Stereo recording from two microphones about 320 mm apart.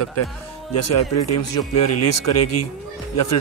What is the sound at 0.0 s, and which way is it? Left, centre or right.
Speech, left.